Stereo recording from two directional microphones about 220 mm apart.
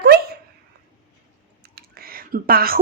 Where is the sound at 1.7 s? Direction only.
40° right (ahead or behind).